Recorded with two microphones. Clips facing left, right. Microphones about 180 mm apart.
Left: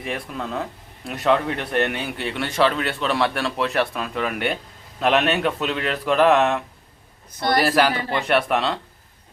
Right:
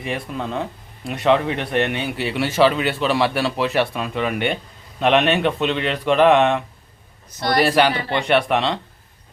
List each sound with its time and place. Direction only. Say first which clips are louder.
0.0 s speech: right 3 dB; centre (ahead or behind)
7.6 s speech: right 4 dB; centre (ahead or behind)